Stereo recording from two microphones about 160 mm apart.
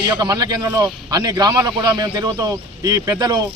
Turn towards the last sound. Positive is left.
turn(degrees=-25)  # may be behind; listen again after turning